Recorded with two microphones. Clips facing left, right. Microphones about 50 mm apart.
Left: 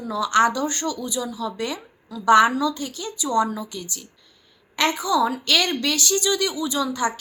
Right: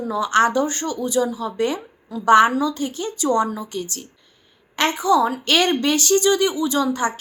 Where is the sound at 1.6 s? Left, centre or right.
Right.